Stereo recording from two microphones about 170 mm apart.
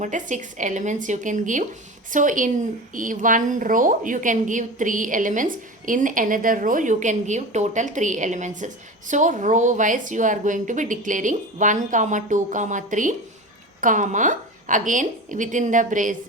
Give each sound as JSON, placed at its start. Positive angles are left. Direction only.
{"t": 0.0, "sound": "a woman's voice", "side_deg": -45}